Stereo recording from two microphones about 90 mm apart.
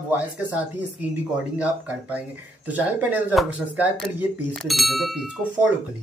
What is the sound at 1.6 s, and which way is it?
Speech, 15° right (ahead or behind).